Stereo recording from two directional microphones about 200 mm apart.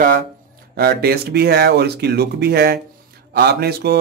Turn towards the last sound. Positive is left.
turn(degrees=-55)  # may be behind; listen again after turning